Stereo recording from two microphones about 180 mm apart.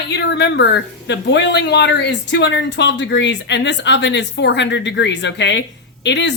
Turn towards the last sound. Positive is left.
turn(degrees=75)  # may be behind; listen again after turning